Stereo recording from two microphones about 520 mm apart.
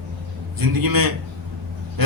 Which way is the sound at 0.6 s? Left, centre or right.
Right.